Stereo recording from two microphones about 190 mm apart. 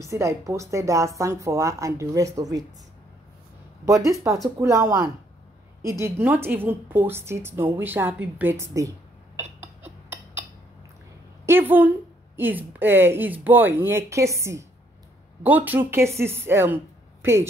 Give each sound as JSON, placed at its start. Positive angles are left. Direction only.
{"t": 0.0, "sound": "a woman's voice", "side_deg": -15}
{"t": 3.8, "sound": "a woman's voice", "side_deg": -15}
{"t": 10.0, "sound": "a sound", "side_deg": -10}
{"t": 11.4, "sound": "a woman's voice", "side_deg": -10}